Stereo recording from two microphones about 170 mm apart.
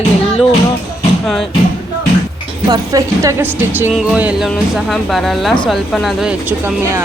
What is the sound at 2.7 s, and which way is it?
Speech, 20° right (ahead or behind).